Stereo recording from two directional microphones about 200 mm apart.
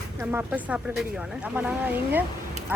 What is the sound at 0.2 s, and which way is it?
Speech, 10° right (ahead or behind).